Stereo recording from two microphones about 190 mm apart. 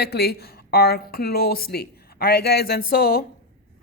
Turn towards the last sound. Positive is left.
turn(degrees=50)  # may be behind; listen again after turning